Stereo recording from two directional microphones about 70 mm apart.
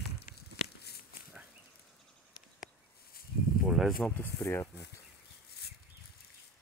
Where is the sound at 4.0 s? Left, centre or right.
Centre.